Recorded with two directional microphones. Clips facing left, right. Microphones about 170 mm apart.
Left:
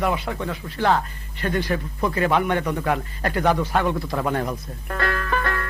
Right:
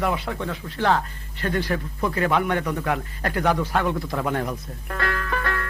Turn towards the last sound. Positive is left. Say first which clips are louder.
# left 2 dB
turn(degrees=35)  # may be behind; listen again after turning